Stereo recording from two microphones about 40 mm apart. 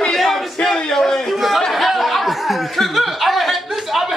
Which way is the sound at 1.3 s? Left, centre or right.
Centre.